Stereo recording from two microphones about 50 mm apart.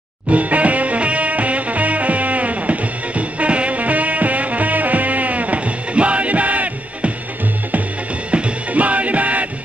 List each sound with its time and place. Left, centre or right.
0.3 s music: right
8.3 s music: right